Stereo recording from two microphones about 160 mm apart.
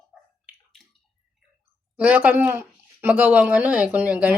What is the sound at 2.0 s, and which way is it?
Speech, 10° right (ahead or behind).